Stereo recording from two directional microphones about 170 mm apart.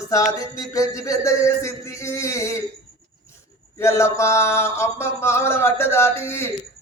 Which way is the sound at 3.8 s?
15° left (ahead or behind).